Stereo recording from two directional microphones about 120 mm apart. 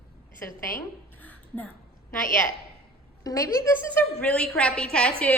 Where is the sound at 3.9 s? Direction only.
10° left (ahead or behind).